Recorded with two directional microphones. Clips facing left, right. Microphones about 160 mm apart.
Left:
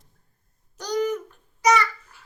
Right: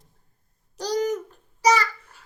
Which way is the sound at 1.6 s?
30° right (ahead or behind).